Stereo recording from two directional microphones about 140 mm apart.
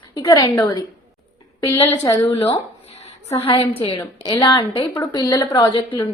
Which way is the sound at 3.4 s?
40° left (ahead or behind).